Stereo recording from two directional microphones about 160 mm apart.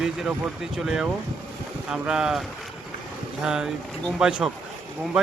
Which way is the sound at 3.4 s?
5° right (ahead or behind).